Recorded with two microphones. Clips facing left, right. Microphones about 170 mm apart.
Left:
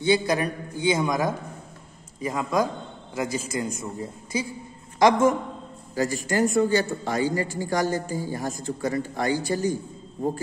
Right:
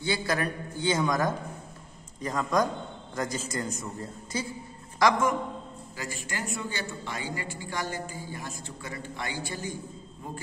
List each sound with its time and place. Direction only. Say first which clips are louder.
0.0 s a man's voice: left 7 dB; 20° left (ahead or behind)
4.9 s a man's voice: left 6 dB; 25° left (ahead or behind)
5.9 s a man's voice: left 13 dB; 40° left (ahead or behind)